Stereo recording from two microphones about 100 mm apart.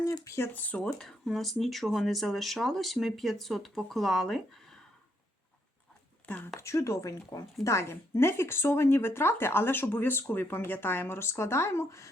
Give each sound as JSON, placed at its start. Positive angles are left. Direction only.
{"t": 0.0, "sound": "speech", "side_deg": 35}
{"t": 0.3, "sound": "speech", "side_deg": 20}
{"t": 6.2, "sound": "speech", "side_deg": 15}
{"t": 6.6, "sound": "speech", "side_deg": 30}